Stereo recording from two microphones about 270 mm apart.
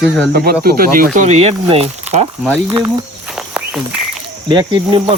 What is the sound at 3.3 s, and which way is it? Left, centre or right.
Walk, centre.